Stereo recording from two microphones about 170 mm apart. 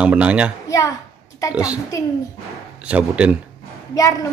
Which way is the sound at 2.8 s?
5° right (ahead or behind).